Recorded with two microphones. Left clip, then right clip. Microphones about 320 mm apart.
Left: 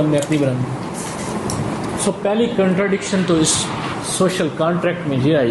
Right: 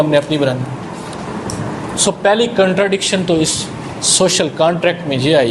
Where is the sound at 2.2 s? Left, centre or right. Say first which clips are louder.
Right 5 dB; right.